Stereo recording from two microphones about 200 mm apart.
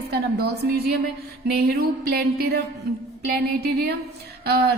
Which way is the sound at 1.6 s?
50° right (ahead or behind).